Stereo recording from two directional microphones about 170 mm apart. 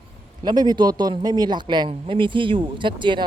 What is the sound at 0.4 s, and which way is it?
A man's voice, 25° right (ahead or behind).